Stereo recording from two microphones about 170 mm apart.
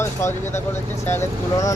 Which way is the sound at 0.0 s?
15° left (ahead or behind).